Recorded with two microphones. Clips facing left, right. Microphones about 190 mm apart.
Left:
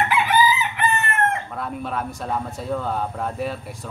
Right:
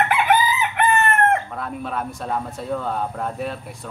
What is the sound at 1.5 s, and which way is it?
A man's voice, centre (ahead or behind).